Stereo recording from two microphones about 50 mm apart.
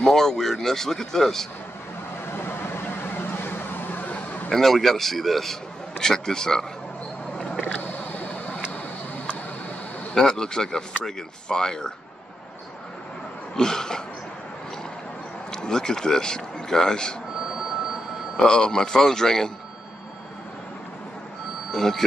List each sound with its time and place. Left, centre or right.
0.0 s a man's voice: centre
2.3 s vehicle: left
4.1 s a sound: left
4.5 s a man's voice: centre
7.8 s a sound: left
10.1 s a man's voice: centre
13.6 s a man's voice: centre
15.5 s speech: centre
18.4 s a man's voice: centre
21.7 s a man's voice: centre